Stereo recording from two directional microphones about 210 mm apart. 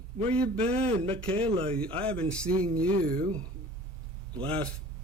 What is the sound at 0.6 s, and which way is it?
Speech, 30° right (ahead or behind).